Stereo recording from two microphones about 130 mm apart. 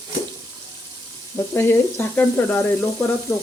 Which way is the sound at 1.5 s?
15° left (ahead or behind).